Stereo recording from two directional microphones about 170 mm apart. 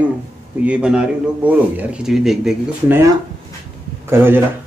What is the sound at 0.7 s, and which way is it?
A man's voice, 5° right (ahead or behind).